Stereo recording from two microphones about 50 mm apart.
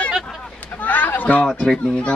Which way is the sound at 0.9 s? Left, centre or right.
Left.